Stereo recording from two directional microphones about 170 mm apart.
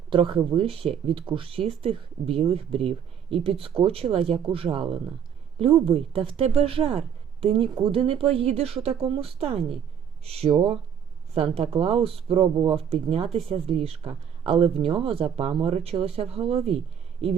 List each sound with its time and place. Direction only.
0.1 s speech: 30° right (ahead or behind)
11.5 s speech: 35° right (ahead or behind)